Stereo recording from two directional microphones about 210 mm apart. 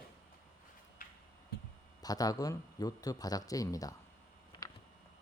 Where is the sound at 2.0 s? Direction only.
15° left (ahead or behind).